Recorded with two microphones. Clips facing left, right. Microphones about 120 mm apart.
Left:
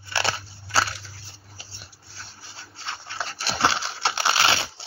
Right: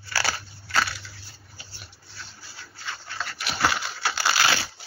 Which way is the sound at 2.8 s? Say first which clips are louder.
Left 2 dB; 25° left (ahead or behind).